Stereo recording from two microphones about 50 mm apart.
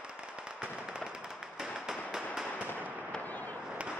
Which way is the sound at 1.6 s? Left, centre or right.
Centre.